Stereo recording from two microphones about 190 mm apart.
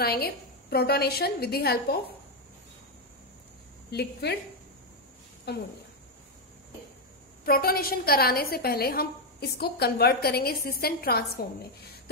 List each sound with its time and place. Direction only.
0.0 s a woman's voice: 55° left (ahead or behind)
3.9 s a woman's voice: 60° left (ahead or behind)
5.5 s a woman's voice: 60° left (ahead or behind)
7.4 s a woman's voice: 50° left (ahead or behind)